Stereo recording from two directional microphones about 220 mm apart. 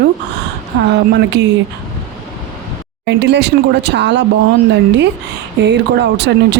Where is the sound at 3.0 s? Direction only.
50° right (ahead or behind).